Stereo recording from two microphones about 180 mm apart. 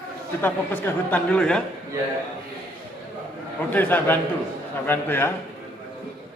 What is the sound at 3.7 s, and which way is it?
Speech, 10° left (ahead or behind).